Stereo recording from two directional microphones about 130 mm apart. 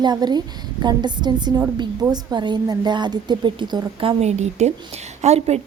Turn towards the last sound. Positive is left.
turn(degrees=-55)  # may be behind; listen again after turning